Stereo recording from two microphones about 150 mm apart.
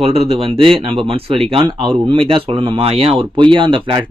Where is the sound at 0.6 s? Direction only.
35° right (ahead or behind).